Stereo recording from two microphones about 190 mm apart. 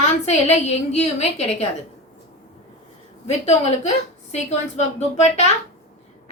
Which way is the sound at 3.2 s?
35° left (ahead or behind).